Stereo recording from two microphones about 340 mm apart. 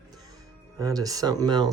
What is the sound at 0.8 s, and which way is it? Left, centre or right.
Speech, centre.